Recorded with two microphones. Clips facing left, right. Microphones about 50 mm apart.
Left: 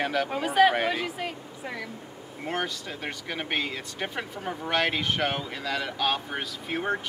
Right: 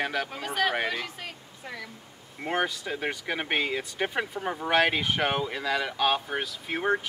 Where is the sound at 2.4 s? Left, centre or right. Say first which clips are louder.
Right 3 dB; centre.